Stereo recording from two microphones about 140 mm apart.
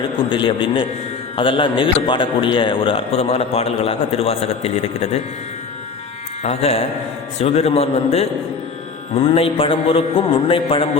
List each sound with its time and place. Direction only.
0.3 s mantra: 35° left (ahead or behind)
1.4 s a man's voice: 40° left (ahead or behind)
6.4 s a man's voice: 50° left (ahead or behind)
9.1 s mantra: 40° left (ahead or behind)